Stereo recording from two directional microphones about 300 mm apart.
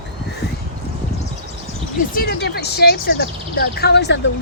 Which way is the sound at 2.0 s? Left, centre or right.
Left.